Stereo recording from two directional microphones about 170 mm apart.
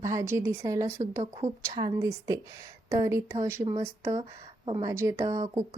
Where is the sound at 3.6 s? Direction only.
30° right (ahead or behind).